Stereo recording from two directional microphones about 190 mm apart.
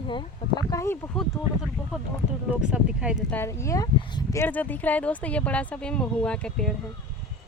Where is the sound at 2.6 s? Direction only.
5° right (ahead or behind).